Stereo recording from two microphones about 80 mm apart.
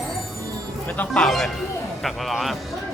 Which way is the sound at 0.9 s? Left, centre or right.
Centre.